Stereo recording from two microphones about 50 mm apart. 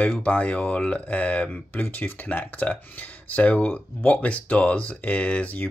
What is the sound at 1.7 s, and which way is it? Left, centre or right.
Speech, left.